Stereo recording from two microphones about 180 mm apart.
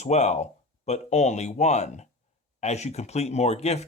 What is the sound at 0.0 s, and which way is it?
Speech, 40° left (ahead or behind).